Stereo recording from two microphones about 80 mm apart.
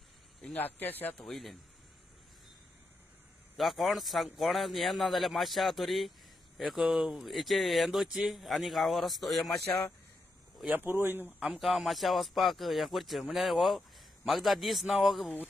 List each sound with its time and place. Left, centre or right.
0.4 s speech: left
1.1 s speech: centre
3.5 s speech: centre
10.7 s speech: right
11.2 s speech: centre